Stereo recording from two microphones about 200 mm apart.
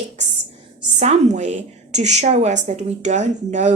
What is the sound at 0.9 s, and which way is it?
A woman's voice, 35° right (ahead or behind).